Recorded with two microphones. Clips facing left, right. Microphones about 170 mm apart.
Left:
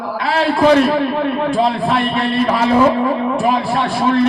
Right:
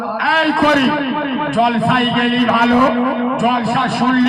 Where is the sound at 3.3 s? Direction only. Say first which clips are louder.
Right 1 dB; 30° left (ahead or behind).